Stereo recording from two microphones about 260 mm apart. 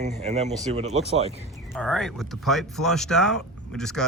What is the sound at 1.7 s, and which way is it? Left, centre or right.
Speech, centre.